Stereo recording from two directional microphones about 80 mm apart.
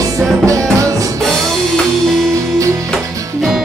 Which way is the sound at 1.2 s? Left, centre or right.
Centre.